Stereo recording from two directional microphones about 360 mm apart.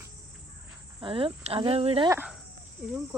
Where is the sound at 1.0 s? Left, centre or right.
Centre.